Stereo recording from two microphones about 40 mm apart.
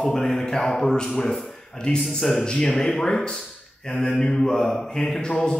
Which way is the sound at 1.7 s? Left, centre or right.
Left.